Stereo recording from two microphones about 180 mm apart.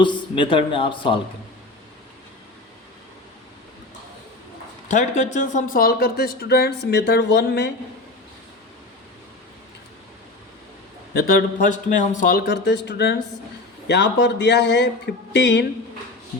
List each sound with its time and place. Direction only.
0.0 s a man's voice: 25° left (ahead or behind)
4.9 s speech: 40° left (ahead or behind)
5.7 s a man's voice: 55° left (ahead or behind); by 7.7 s 70° left (ahead or behind)
11.1 s a man's voice: 55° left (ahead or behind); by 15.6 s 75° left (ahead or behind)